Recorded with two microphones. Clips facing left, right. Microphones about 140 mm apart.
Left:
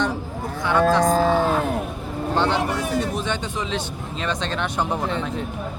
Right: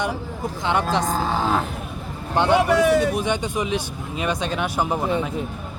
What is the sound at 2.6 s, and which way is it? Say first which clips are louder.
Speech: right 7 dB; 85° right.